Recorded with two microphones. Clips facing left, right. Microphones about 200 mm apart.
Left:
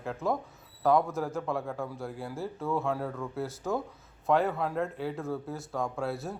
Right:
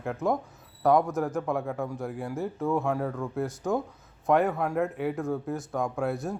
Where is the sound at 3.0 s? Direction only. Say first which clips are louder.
Right 4 dB; centre (ahead or behind).